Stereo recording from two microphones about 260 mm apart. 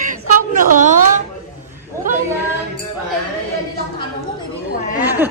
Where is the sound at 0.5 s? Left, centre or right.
Right.